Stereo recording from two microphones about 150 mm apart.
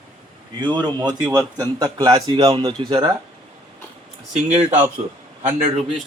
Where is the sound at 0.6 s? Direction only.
30° right (ahead or behind).